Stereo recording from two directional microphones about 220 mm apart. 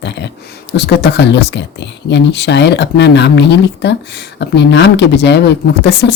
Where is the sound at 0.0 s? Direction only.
50° left (ahead or behind).